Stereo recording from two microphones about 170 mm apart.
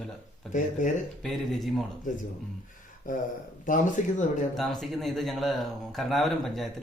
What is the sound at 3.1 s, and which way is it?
Speech, 50° left (ahead or behind).